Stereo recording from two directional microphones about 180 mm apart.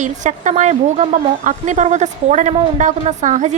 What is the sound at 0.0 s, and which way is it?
Speech, 45° right (ahead or behind).